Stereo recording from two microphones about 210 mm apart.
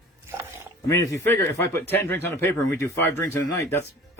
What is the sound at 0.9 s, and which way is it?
Speech, 15° left (ahead or behind).